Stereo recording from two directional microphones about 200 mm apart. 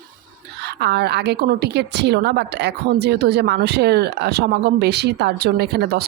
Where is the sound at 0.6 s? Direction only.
55° right (ahead or behind).